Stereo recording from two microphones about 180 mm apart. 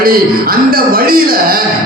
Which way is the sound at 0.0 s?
55° right (ahead or behind).